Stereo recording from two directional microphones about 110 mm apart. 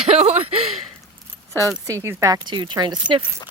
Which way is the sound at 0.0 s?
75° right (ahead or behind).